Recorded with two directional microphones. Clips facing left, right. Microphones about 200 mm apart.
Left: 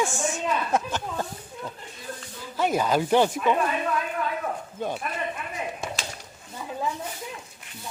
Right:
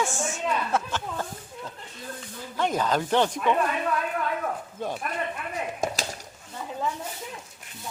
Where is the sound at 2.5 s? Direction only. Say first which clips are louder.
Left 2 dB; 10° left (ahead or behind).